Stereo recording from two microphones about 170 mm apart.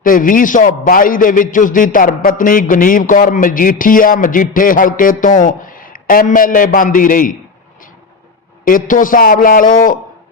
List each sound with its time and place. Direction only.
0.0 s a man's voice: 55° left (ahead or behind)
8.6 s a man's voice: 50° left (ahead or behind)